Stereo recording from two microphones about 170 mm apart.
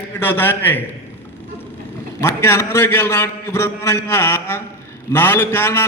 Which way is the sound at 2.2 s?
15° left (ahead or behind).